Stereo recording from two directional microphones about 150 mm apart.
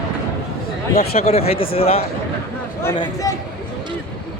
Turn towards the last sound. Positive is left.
turn(degrees=25)  # may be behind; listen again after turning